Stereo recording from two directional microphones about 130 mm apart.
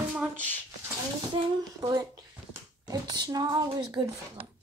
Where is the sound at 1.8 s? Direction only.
30° right (ahead or behind).